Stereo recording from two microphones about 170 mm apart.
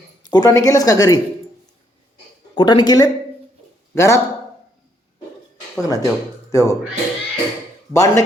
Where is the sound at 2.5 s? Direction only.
25° left (ahead or behind).